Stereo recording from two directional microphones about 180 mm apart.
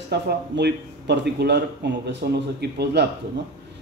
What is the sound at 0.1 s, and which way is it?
A man's voice, 65° right (ahead or behind).